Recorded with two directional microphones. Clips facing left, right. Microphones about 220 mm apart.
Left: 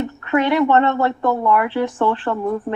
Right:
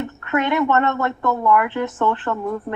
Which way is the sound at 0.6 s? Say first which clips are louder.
Left 3 dB; 30° left (ahead or behind).